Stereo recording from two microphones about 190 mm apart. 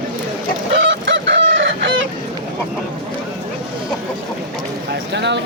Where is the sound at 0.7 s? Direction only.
75° right (ahead or behind).